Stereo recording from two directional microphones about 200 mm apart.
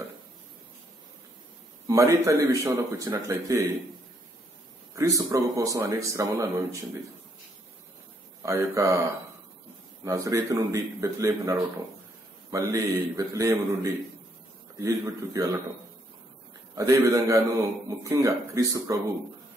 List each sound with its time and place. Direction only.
1.9 s speech: 15° right (ahead or behind)
4.9 s speech: 15° right (ahead or behind)
8.4 s speech: 15° right (ahead or behind)
10.0 s speech: 15° right (ahead or behind)
14.8 s speech: 15° right (ahead or behind)
16.7 s speech: 15° right (ahead or behind)